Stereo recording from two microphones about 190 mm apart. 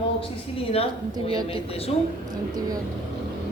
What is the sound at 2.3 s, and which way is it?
Speech, 20° right (ahead or behind).